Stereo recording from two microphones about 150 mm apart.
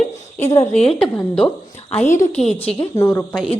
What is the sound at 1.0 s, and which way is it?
Speech, 5° left (ahead or behind).